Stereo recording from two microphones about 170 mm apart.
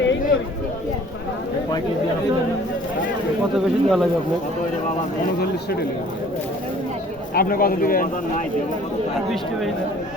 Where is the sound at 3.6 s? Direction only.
Centre (ahead or behind).